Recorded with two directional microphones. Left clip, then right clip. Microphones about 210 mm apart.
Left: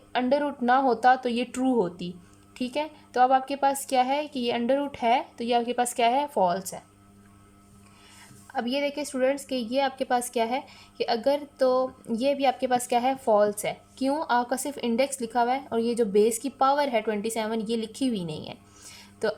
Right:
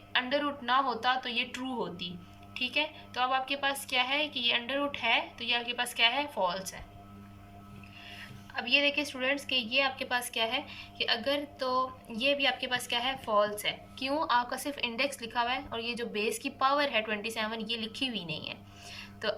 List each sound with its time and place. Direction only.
0.1 s a woman's voice: 60° left (ahead or behind)
8.5 s a woman's voice: 60° left (ahead or behind)